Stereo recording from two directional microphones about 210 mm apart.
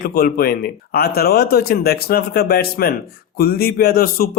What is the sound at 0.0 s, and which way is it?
A man's voice, 45° left (ahead or behind).